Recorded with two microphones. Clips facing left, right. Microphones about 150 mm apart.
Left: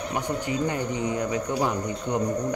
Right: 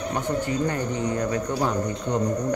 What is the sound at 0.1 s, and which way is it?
Speech, 15° left (ahead or behind).